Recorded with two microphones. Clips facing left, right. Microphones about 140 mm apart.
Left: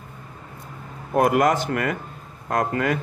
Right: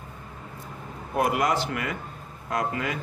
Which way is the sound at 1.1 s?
50° left (ahead or behind).